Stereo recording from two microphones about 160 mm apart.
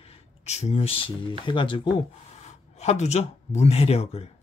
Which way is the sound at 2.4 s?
45° left (ahead or behind).